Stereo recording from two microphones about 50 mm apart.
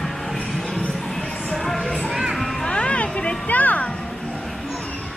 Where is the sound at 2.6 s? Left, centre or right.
Left.